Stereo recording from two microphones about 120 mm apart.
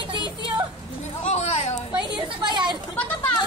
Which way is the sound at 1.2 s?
65° left (ahead or behind).